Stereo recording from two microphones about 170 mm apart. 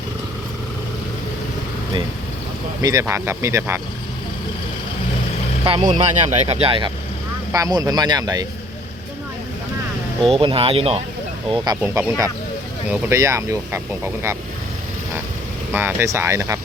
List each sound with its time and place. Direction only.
2.8 s speech: 15° right (ahead or behind)
5.8 s speech: 40° right (ahead or behind)
7.5 s speech: 20° right (ahead or behind)
10.2 s speech: 30° right (ahead or behind)
11.5 s speech: 25° right (ahead or behind)
11.8 s speech: 10° right (ahead or behind)
15.7 s speech: 15° right (ahead or behind)